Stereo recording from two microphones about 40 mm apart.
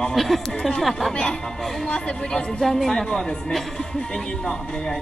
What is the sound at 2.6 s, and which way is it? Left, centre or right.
Speech, centre.